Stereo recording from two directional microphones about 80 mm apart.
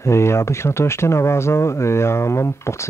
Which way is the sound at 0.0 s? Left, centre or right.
Left.